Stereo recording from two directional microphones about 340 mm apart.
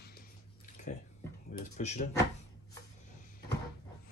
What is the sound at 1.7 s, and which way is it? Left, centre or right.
Speech, centre.